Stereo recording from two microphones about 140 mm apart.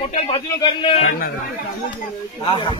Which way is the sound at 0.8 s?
50° left (ahead or behind).